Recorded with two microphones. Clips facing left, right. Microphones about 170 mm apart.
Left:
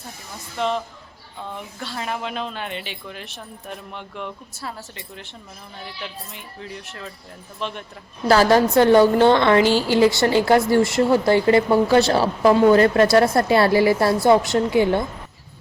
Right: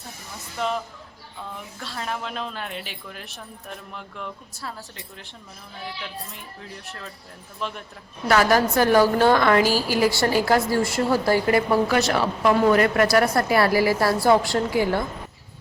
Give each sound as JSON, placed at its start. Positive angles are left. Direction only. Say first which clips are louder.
{"t": 0.6, "sound": "a woman's voice", "louder": "left 3 dB", "side_deg": 0}
{"t": 1.8, "sound": "a woman's voice", "louder": "left 3 dB", "side_deg": 0}
{"t": 6.3, "sound": "a woman's voice", "louder": "left 4 dB", "side_deg": 0}
{"t": 8.3, "sound": "a woman's voice", "louder": "left 4 dB", "side_deg": 30}